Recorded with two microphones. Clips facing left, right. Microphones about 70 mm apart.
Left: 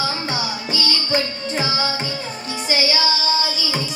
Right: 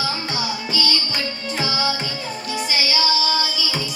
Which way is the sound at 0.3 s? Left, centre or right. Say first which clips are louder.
Even; left.